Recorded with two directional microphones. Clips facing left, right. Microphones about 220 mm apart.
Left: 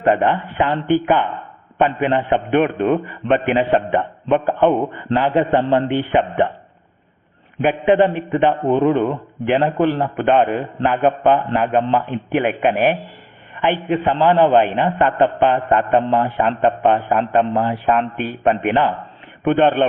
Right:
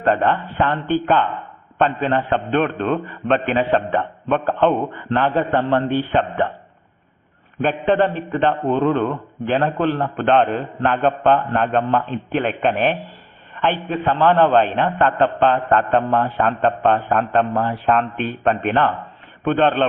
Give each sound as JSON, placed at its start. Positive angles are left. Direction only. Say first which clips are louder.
{"t": 0.0, "sound": "a man's voice", "louder": "left 2 dB", "side_deg": 15}
{"t": 7.6, "sound": "a man's voice", "louder": "left 3 dB", "side_deg": 10}